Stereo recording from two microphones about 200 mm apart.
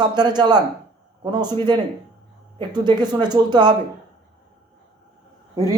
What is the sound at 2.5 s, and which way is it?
Speech, 20° right (ahead or behind).